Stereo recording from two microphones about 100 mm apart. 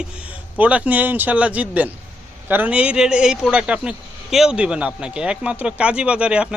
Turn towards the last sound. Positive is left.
turn(degrees=-10)  # may be behind; listen again after turning